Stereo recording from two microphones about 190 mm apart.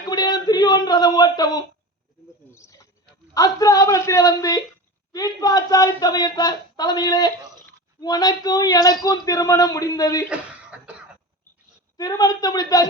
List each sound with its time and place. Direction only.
0.0 s speech: 20° left (ahead or behind)
2.5 s snake: 15° left (ahead or behind)
3.3 s a woman's voice: 20° left (ahead or behind)
10.2 s cough: 5° right (ahead or behind)
11.9 s a man's voice: 20° left (ahead or behind)